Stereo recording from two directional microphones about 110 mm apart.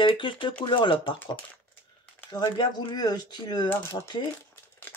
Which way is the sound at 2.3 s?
40° left (ahead or behind).